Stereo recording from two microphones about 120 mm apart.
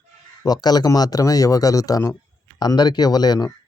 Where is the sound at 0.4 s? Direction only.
35° left (ahead or behind).